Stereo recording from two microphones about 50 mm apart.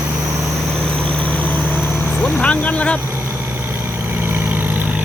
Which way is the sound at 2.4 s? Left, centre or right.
Left.